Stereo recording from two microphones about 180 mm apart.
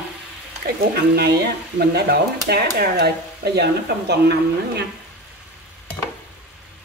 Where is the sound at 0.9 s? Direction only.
60° right (ahead or behind).